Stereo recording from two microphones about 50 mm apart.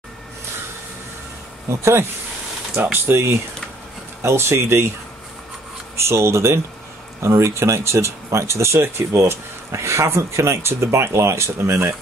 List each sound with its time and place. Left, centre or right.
1.7 s speech: right
2.7 s speech: right
4.2 s speech: right
5.9 s speech: right